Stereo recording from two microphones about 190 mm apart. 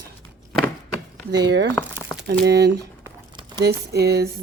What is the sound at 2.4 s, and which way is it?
Speech, 60° right (ahead or behind).